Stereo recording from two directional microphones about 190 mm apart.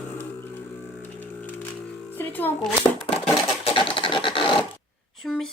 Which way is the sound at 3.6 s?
25° left (ahead or behind).